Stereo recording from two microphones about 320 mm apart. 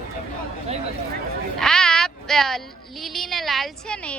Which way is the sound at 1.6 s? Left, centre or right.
Centre.